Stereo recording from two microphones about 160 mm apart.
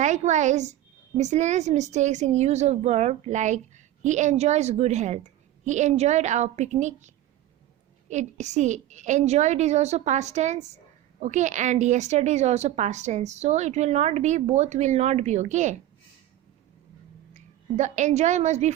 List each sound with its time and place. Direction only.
0.0 s a woman's voice: 50° right (ahead or behind)
8.1 s a woman's voice: 45° right (ahead or behind)
17.3 s a woman's voice: 50° right (ahead or behind)